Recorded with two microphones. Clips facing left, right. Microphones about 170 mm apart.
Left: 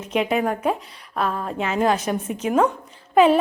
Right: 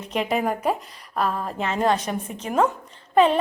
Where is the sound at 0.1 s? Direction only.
Centre (ahead or behind).